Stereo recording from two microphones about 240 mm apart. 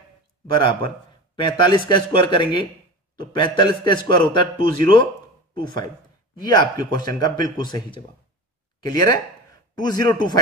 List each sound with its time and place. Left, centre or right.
0.5 s a man's voice: centre